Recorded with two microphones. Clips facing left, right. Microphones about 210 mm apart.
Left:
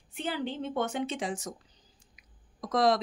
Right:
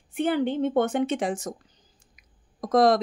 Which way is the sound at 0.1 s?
55° right (ahead or behind).